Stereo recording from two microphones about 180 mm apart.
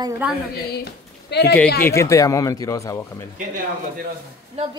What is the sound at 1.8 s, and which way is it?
Speech, 15° left (ahead or behind).